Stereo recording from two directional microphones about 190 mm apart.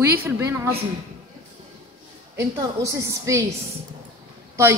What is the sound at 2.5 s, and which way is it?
Speech, 15° right (ahead or behind).